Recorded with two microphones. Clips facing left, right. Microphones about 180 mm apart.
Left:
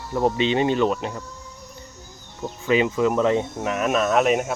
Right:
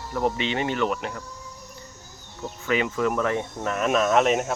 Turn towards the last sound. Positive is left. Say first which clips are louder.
# left 1 dB
turn(degrees=5)  # may be behind; listen again after turning